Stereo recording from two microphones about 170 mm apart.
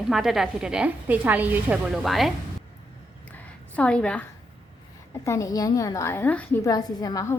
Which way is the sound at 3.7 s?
5° left (ahead or behind).